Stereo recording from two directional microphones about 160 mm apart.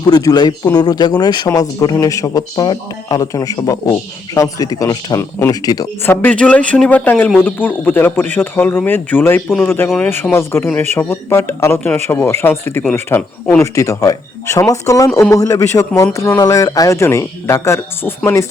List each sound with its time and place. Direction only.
0.1 s speech: 25° left (ahead or behind)
6.1 s speech: 10° left (ahead or behind)